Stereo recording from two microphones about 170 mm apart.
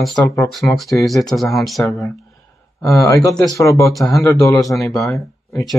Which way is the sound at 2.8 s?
20° left (ahead or behind).